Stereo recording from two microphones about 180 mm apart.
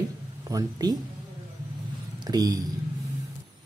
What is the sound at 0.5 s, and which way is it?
Speech, 20° right (ahead or behind).